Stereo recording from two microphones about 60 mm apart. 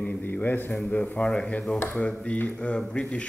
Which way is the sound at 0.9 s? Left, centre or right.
Left.